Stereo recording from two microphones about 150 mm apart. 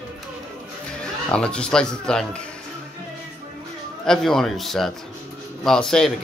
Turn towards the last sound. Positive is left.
turn(degrees=5)  # may be behind; listen again after turning